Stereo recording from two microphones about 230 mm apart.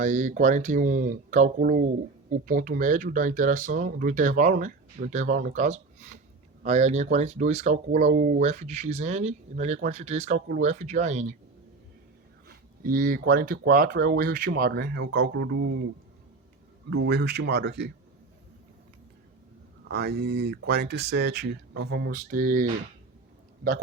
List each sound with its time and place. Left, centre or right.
0.0 s speech: right
12.5 s speech: right
16.9 s speech: right
19.9 s speech: right